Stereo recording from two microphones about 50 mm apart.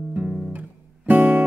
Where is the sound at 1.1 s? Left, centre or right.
Right.